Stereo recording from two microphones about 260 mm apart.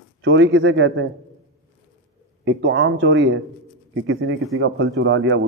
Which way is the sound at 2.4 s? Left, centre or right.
Right.